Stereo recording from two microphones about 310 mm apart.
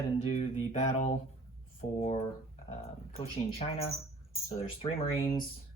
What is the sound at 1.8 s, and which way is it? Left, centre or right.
Speech, centre.